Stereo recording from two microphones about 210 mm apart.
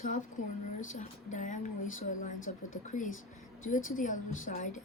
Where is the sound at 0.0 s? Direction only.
35° left (ahead or behind).